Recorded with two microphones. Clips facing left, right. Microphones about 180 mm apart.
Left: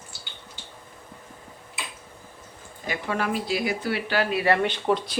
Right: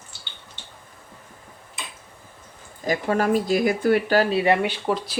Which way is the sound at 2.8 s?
40° right (ahead or behind).